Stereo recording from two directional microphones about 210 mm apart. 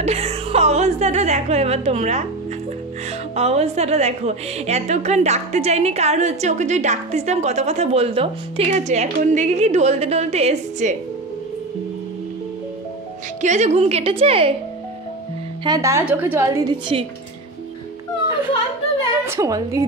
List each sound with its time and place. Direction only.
0.0 s speech: 30° right (ahead or behind)
3.3 s a woman's voice: 30° right (ahead or behind)
13.4 s a woman's voice: 35° right (ahead or behind)
15.6 s a woman's voice: 15° right (ahead or behind)
19.2 s a woman's voice: 15° right (ahead or behind)